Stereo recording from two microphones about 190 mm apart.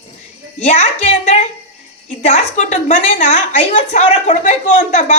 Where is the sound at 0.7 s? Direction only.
35° left (ahead or behind).